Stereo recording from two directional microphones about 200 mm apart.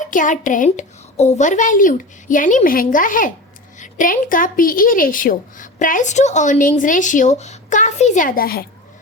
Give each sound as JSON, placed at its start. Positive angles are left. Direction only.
{"t": 0.0, "sound": "a woman's voice", "side_deg": 40}